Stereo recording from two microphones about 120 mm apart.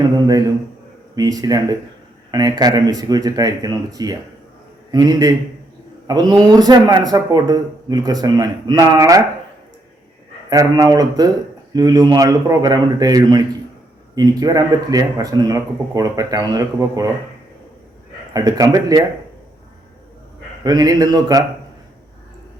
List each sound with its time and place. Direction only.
0.2 s speech: 30° right (ahead or behind)
10.5 s speech: 30° right (ahead or behind)
18.3 s speech: 30° right (ahead or behind)
20.7 s speech: 30° right (ahead or behind)